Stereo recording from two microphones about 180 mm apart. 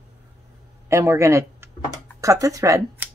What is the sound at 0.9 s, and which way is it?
A man's voice, 15° right (ahead or behind).